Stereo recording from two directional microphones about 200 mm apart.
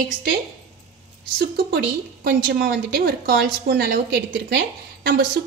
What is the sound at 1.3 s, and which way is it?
A woman's voice, 45° right (ahead or behind).